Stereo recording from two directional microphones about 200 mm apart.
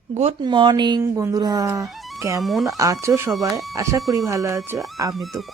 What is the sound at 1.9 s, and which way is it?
Music, centre (ahead or behind).